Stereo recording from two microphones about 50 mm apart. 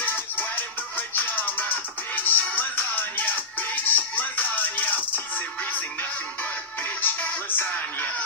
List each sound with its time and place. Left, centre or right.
0.0 s music: left